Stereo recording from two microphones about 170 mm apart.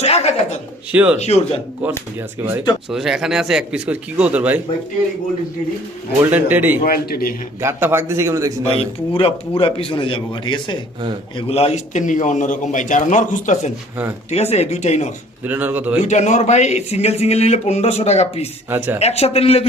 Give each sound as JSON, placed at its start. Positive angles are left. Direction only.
{"t": 0.0, "sound": "a sound", "side_deg": 40}
{"t": 0.9, "sound": "a man's voice", "side_deg": -10}
{"t": 1.2, "sound": "speech", "side_deg": 40}
{"t": 2.9, "sound": "speech", "side_deg": 0}
{"t": 6.3, "sound": "a man's voice", "side_deg": -10}
{"t": 6.8, "sound": "a man's voice", "side_deg": 60}
{"t": 7.6, "sound": "a man's voice", "side_deg": -15}
{"t": 8.7, "sound": "a man's voice", "side_deg": 35}
{"t": 15.4, "sound": "a man's voice", "side_deg": -10}
{"t": 16.0, "sound": "speech", "side_deg": 45}
{"t": 18.7, "sound": "a man's voice", "side_deg": -10}
{"t": 18.9, "sound": "speech", "side_deg": 40}